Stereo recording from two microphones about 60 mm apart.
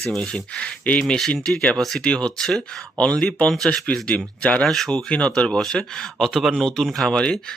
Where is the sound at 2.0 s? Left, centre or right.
Centre.